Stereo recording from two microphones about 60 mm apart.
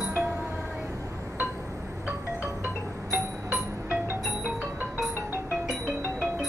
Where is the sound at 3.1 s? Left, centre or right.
Right.